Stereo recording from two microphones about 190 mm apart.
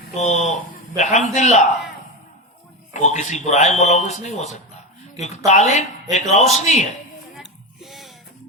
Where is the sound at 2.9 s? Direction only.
40° left (ahead or behind).